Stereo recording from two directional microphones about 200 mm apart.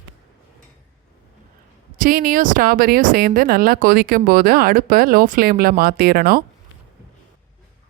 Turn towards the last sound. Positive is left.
turn(degrees=-50)  # may be behind; listen again after turning